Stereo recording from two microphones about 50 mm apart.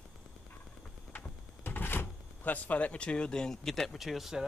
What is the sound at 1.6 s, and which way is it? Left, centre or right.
Speech, left.